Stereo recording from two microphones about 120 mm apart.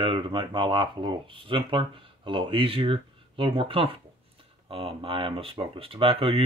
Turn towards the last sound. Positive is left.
turn(degrees=-50)  # may be behind; listen again after turning